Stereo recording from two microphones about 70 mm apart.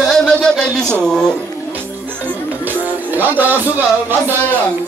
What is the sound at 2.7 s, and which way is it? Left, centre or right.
Music, right.